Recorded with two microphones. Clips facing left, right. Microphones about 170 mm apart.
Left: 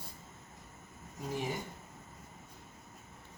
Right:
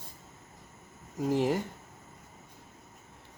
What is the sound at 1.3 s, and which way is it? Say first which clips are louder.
Speech: right 10 dB; 75° right (ahead or behind).